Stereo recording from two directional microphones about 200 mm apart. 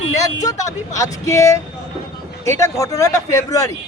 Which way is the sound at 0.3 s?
15° left (ahead or behind).